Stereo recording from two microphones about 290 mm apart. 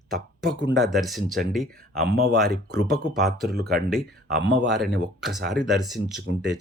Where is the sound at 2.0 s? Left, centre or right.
Right.